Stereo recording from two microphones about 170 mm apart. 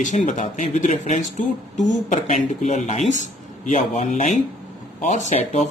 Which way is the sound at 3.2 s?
50° left (ahead or behind).